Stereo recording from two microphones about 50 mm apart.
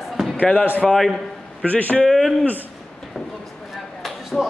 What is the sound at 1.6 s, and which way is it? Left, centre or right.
Speech, left.